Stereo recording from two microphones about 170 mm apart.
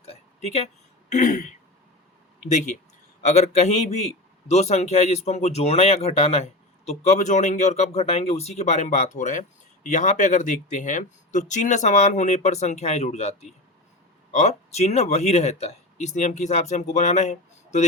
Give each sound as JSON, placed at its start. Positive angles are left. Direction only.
{"t": 1.1, "sound": "throat clearing", "side_deg": 50}
{"t": 2.5, "sound": "throat clearing", "side_deg": 45}
{"t": 3.2, "sound": "speech", "side_deg": 40}